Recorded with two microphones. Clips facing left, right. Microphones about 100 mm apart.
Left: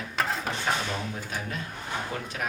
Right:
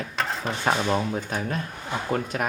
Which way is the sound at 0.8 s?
55° right (ahead or behind).